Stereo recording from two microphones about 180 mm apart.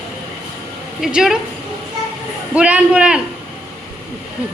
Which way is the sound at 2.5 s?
5° right (ahead or behind).